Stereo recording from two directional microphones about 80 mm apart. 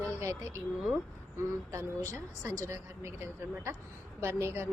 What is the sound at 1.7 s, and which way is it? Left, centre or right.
A woman's voice, right.